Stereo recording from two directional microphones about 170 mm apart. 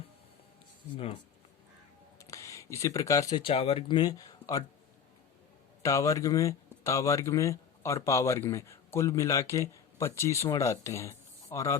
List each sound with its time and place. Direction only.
2.1 s a sound: 20° left (ahead or behind)
3.4 s speech: 35° left (ahead or behind)
5.8 s speech: 20° left (ahead or behind)